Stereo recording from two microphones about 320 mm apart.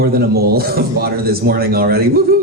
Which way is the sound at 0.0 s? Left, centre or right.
Right.